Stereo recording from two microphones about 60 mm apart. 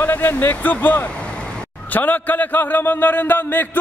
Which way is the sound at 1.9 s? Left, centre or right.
Left.